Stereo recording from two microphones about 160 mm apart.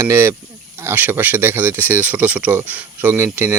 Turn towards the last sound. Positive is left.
turn(degrees=-10)  # may be behind; listen again after turning